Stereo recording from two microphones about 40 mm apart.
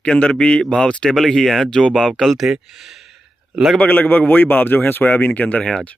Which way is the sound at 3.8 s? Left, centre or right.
Left.